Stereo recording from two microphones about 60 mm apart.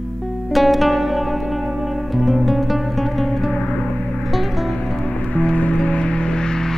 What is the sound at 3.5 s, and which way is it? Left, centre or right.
Music, centre.